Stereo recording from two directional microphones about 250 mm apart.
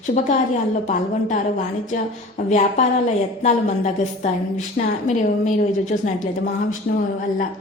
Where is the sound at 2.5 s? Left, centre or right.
Left.